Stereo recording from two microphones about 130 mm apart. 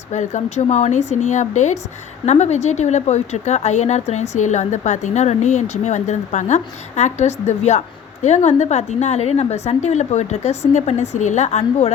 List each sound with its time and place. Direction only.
0.1 s speech: 65° left (ahead or behind)